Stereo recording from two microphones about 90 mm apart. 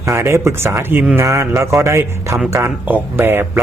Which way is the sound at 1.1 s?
35° right (ahead or behind).